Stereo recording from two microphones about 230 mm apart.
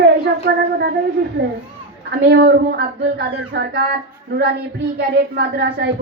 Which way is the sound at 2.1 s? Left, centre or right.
Right.